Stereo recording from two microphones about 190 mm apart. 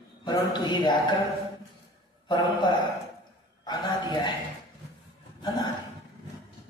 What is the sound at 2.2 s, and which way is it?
A man's voice, 25° left (ahead or behind).